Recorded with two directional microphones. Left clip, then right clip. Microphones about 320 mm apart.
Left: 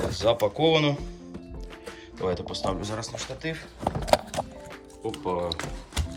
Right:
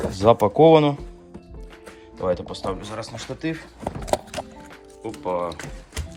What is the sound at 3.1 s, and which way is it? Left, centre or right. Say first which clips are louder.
Speech: right 3 dB; centre.